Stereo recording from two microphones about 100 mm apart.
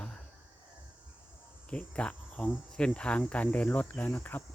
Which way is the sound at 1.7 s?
15° left (ahead or behind).